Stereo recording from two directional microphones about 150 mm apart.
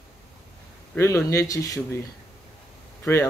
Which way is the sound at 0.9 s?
20° left (ahead or behind).